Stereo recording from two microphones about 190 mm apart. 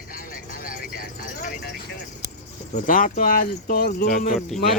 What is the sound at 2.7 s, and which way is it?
Speech, 45° left (ahead or behind).